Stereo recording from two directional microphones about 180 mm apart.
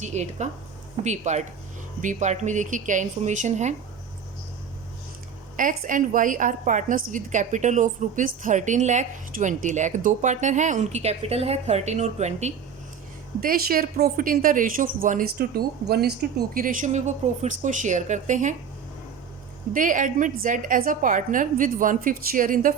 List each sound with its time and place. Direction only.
0.0 s a woman's voice: 40° right (ahead or behind)
5.5 s a woman's voice: 50° right (ahead or behind)
13.4 s a woman's voice: 55° right (ahead or behind)
16.6 s a woman's voice: 50° right (ahead or behind)
19.7 s a woman's voice: 45° right (ahead or behind)